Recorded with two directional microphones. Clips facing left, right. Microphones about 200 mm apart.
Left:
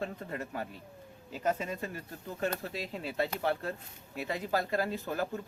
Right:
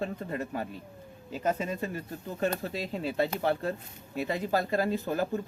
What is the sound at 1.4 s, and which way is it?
Speech, 25° right (ahead or behind).